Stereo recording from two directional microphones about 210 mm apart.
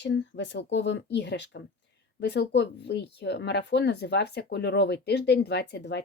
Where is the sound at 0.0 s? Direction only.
55° left (ahead or behind).